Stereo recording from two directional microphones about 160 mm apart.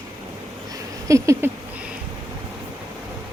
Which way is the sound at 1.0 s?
20° right (ahead or behind).